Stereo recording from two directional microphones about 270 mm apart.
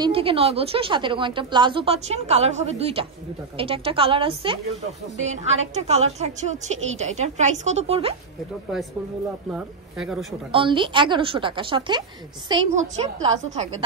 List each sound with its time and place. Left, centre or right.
0.0 s a woman's voice: centre
9.5 s speech: centre
10.5 s a woman's voice: centre